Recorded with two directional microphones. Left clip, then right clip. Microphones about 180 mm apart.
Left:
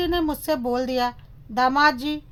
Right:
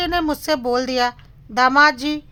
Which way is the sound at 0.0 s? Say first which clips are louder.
Right 3 dB; 15° right (ahead or behind).